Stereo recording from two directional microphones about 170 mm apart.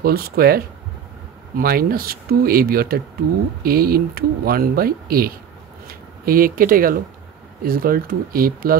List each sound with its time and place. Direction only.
0.0 s speech: 60° right (ahead or behind)
1.6 s speech: 60° right (ahead or behind)